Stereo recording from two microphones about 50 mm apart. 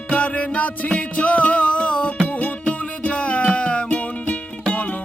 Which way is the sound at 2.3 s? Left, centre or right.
Left.